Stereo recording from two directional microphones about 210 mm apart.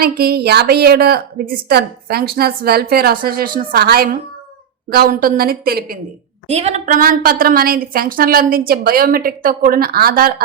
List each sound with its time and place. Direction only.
0.0 s a woman's voice: 45° right (ahead or behind)
6.5 s a woman's voice: 30° right (ahead or behind)